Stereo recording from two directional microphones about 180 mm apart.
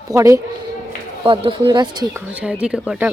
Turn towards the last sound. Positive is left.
turn(degrees=-5)  # may be behind; listen again after turning